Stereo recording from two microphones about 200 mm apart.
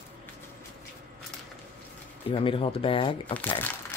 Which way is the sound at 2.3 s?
25° left (ahead or behind).